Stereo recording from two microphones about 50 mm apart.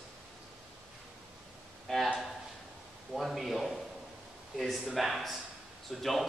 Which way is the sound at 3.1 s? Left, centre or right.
Centre.